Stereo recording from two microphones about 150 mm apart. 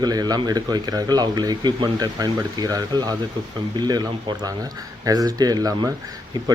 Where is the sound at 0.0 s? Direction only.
25° right (ahead or behind).